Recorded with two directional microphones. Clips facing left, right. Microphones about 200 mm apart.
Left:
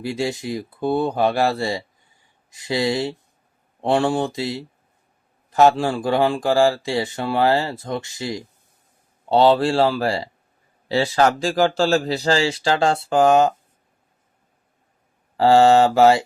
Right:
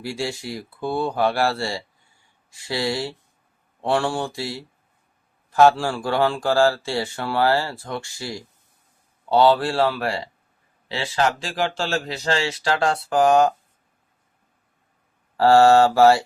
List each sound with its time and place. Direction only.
0.0 s speech: 20° left (ahead or behind)
10.8 s speech: 45° left (ahead or behind); by 13.5 s 25° left (ahead or behind)
15.4 s speech: 15° left (ahead or behind)